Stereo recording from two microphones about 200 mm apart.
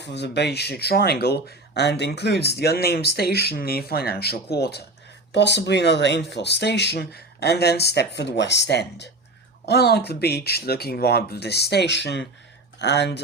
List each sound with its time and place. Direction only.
0.0 s speech: 60° left (ahead or behind)